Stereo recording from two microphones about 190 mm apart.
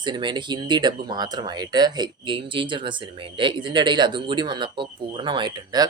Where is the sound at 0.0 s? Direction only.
25° right (ahead or behind).